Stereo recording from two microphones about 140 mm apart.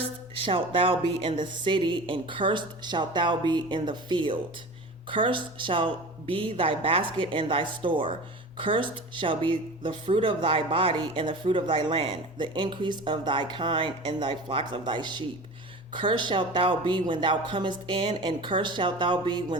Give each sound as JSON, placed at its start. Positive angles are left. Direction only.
{"t": 0.0, "sound": "speech", "side_deg": -40}